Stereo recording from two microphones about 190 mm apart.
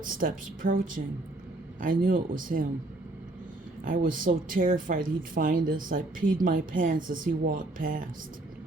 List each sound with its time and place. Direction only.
0.0 s speech: 45° right (ahead or behind)
3.8 s speech: 45° right (ahead or behind)